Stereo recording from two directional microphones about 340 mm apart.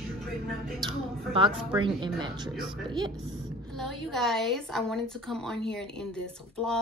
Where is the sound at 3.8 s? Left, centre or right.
Centre.